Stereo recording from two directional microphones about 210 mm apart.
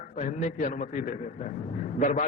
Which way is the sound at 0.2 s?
35° left (ahead or behind).